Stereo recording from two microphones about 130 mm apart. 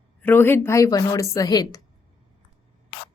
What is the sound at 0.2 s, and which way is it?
A woman's voice, 15° left (ahead or behind).